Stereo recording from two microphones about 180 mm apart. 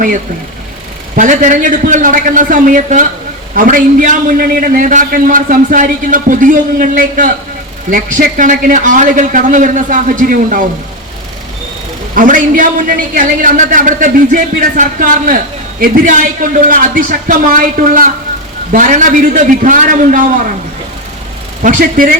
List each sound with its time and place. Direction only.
1.1 s a man's voice: 45° right (ahead or behind)
12.1 s a man's voice: 50° right (ahead or behind)
21.6 s a man's voice: 45° right (ahead or behind)